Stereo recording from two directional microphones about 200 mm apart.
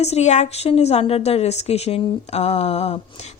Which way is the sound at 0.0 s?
35° left (ahead or behind).